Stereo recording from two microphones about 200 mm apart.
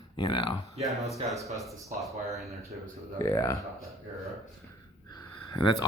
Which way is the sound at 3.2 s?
15° left (ahead or behind).